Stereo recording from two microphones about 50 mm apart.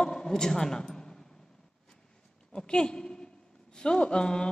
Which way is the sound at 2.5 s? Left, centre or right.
Centre.